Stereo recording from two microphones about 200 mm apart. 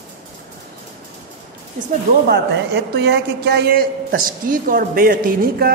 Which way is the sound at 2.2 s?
60° right (ahead or behind).